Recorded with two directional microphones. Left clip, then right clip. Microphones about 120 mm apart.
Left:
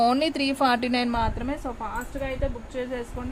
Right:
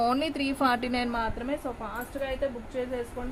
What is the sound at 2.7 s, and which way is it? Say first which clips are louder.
Speech: left 2 dB; 75° left (ahead or behind).